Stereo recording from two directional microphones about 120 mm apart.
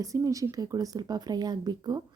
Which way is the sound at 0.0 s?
30° right (ahead or behind).